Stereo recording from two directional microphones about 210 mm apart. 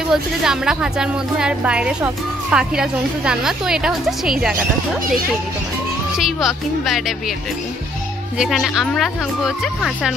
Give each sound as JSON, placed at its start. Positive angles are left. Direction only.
{"t": 0.1, "sound": "a woman's voice", "side_deg": -5}
{"t": 6.1, "sound": "a woman's voice", "side_deg": 0}
{"t": 8.4, "sound": "a woman's voice", "side_deg": 0}